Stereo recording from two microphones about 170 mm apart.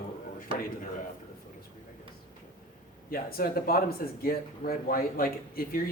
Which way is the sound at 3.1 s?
60° left (ahead or behind).